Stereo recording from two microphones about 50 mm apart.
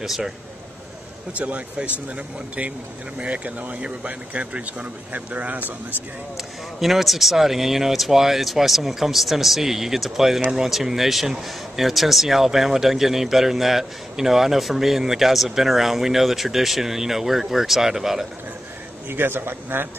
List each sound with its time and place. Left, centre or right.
0.0 s speech: centre
1.3 s speech: right
6.3 s speech: centre
19.0 s a man's voice: right